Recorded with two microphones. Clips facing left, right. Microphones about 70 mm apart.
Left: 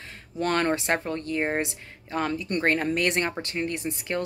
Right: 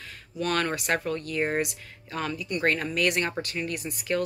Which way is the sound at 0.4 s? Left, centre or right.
Left.